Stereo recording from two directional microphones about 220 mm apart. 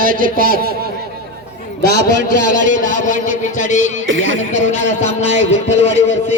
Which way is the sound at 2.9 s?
35° left (ahead or behind).